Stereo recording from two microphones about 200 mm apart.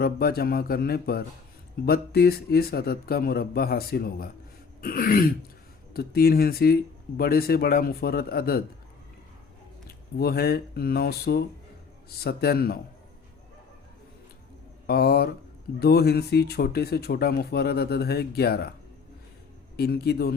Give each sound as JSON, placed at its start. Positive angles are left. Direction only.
{"t": 0.0, "sound": "speech", "side_deg": 50}
{"t": 9.8, "sound": "speech", "side_deg": 50}
{"t": 14.8, "sound": "speech", "side_deg": 50}
{"t": 19.7, "sound": "speech", "side_deg": 50}